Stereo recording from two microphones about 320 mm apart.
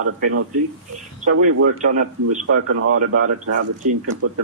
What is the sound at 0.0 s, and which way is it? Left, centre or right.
A man's voice, right.